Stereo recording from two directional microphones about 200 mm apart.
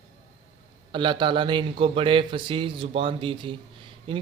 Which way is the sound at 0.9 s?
25° right (ahead or behind).